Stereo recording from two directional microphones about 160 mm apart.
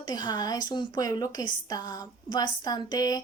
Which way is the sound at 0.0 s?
25° left (ahead or behind).